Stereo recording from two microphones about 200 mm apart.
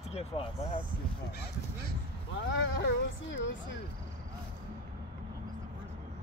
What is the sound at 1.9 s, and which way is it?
Speech, 65° left (ahead or behind).